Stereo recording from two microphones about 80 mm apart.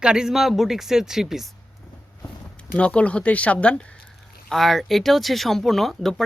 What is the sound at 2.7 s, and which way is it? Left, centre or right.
Speech, centre.